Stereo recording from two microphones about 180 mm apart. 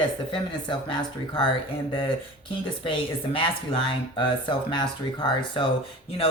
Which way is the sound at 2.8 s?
30° left (ahead or behind).